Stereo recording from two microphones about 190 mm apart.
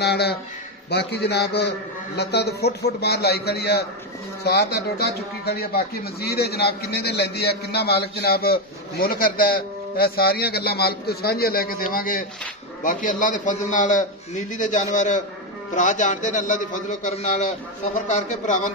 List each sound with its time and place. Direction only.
0.0 s a man's voice: 60° left (ahead or behind); by 18.7 s 40° left (ahead or behind)